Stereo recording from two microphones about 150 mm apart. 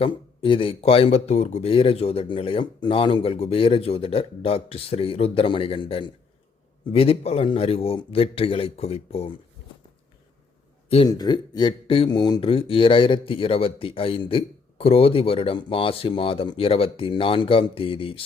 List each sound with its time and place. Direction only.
0.0 s speech: 35° left (ahead or behind)
10.8 s a man's voice: 40° left (ahead or behind)
11.2 s speech: 30° left (ahead or behind)